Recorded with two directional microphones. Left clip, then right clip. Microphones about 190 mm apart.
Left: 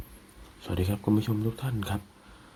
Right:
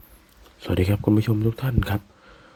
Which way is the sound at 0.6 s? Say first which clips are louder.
Right 8 dB; 35° right (ahead or behind).